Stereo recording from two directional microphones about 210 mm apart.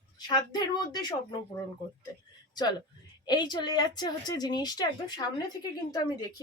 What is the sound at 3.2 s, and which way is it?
Speech, 20° left (ahead or behind).